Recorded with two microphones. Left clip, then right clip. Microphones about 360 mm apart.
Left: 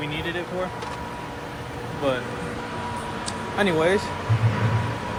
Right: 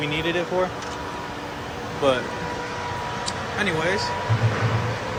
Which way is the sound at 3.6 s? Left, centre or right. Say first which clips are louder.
Left 3 dB; centre.